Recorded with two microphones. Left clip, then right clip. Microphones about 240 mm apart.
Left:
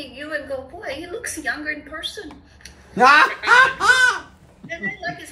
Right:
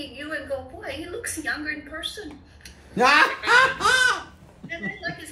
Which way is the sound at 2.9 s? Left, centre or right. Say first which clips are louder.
Left 5 dB; centre.